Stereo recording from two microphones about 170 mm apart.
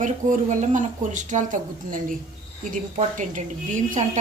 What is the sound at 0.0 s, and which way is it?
Speech, 50° right (ahead or behind).